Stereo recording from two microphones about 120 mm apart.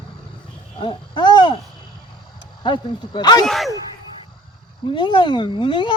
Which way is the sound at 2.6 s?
40° left (ahead or behind).